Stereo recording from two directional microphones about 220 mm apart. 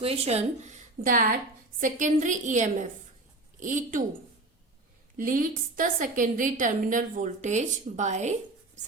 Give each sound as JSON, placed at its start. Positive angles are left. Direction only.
{"t": 0.0, "sound": "a woman's voice", "side_deg": -25}
{"t": 5.1, "sound": "a woman's voice", "side_deg": -40}